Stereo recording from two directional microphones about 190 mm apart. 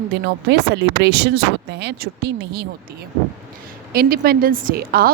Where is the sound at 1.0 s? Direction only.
60° right (ahead or behind).